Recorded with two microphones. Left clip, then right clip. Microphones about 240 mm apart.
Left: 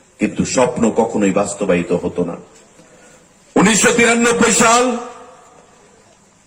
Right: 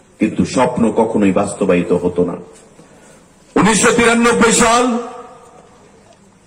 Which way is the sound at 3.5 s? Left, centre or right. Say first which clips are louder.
Right 1 dB; left.